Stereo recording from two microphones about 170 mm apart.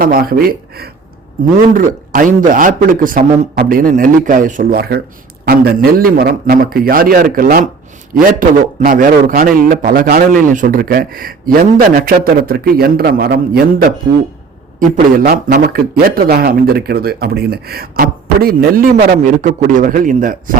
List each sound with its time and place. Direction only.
0.0 s speech: 60° right (ahead or behind)
1.7 s speech: 50° right (ahead or behind)
15.2 s speech: 60° right (ahead or behind)